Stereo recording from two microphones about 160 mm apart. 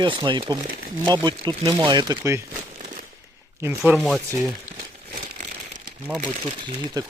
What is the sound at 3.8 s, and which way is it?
Speech, centre (ahead or behind).